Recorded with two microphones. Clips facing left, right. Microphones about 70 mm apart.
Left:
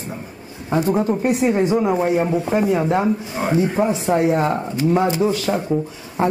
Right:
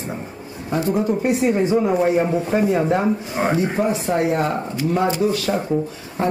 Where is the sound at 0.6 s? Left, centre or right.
Left.